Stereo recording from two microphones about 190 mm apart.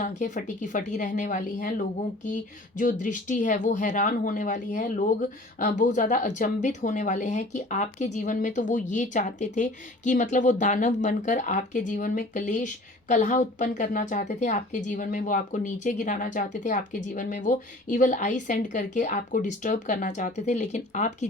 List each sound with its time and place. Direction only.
0.2 s speech: 40° left (ahead or behind)